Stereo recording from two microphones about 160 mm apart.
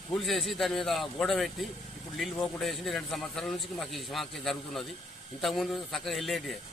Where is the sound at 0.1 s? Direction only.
Centre (ahead or behind).